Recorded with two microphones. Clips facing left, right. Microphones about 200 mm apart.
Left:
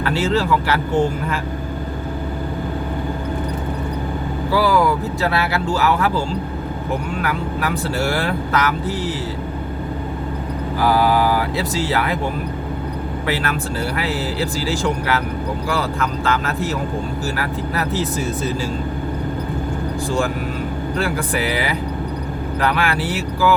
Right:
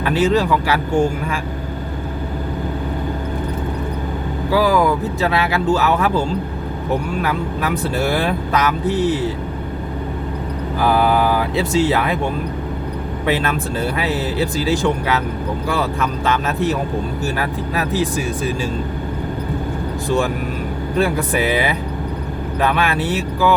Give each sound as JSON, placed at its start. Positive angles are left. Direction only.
{"t": 0.0, "sound": "speech", "side_deg": -15}
{"t": 4.5, "sound": "speech", "side_deg": -15}
{"t": 7.6, "sound": "speech", "side_deg": -20}
{"t": 14.0, "sound": "speech", "side_deg": -20}
{"t": 17.3, "sound": "speech", "side_deg": -15}
{"t": 21.0, "sound": "speech", "side_deg": -20}